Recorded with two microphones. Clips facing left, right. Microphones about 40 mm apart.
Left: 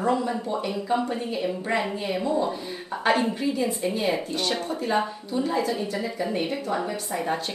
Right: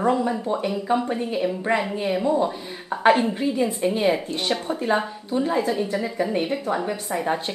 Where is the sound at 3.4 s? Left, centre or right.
Right.